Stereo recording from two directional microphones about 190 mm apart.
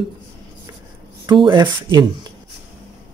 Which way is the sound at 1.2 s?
25° right (ahead or behind).